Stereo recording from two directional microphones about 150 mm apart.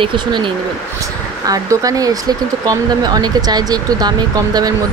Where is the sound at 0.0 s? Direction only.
30° right (ahead or behind).